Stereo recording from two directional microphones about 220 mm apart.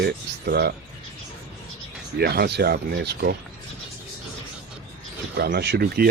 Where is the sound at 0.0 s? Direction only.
45° right (ahead or behind).